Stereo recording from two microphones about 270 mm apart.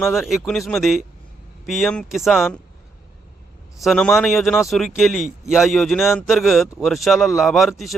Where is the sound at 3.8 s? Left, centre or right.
Centre.